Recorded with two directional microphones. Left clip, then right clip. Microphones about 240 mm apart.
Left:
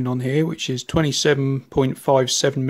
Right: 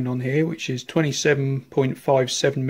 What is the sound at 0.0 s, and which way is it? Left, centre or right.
Speech, left.